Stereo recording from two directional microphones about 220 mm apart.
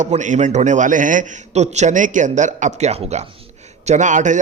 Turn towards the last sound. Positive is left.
turn(degrees=-35)  # may be behind; listen again after turning